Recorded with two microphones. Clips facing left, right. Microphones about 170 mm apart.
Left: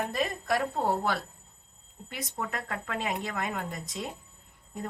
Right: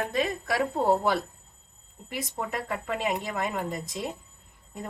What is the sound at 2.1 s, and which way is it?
A woman's voice, 5° right (ahead or behind).